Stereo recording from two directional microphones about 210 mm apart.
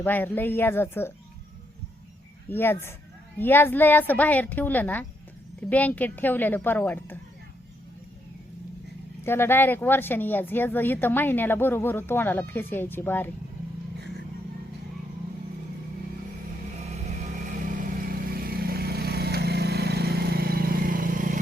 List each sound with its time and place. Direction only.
0.0 s speech: 10° left (ahead or behind)
2.5 s speech: 10° left (ahead or behind)
9.2 s speech: 10° left (ahead or behind)
18.1 s vehicle: 45° right (ahead or behind)